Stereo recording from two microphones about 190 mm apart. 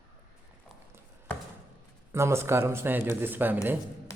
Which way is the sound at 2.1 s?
15° right (ahead or behind).